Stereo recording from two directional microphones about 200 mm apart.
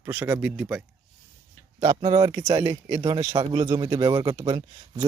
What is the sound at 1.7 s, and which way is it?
Speech, 20° right (ahead or behind).